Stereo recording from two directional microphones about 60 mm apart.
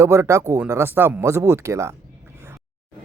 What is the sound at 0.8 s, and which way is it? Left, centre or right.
Speech, right.